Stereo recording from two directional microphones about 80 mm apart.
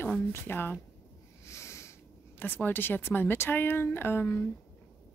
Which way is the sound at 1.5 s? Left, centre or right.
Left.